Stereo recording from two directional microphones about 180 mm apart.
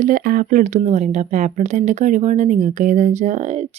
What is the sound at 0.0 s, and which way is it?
Speech, 50° right (ahead or behind).